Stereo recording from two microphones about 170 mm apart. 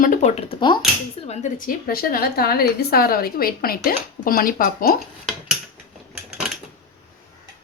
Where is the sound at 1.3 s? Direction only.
50° left (ahead or behind).